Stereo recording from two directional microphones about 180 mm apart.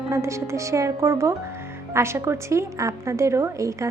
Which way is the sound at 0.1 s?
15° right (ahead or behind).